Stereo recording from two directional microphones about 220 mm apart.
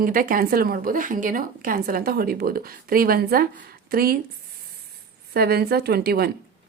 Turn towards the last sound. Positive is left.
turn(degrees=-45)  # may be behind; listen again after turning